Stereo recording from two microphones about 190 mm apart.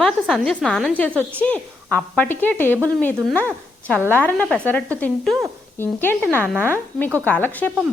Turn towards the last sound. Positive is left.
turn(degrees=10)  # may be behind; listen again after turning